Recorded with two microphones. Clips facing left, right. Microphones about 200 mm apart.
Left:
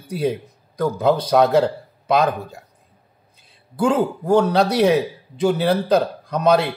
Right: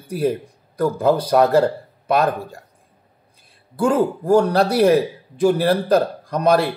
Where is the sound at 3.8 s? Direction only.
10° right (ahead or behind).